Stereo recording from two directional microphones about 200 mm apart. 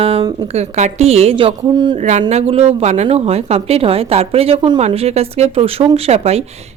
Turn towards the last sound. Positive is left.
turn(degrees=-30)  # may be behind; listen again after turning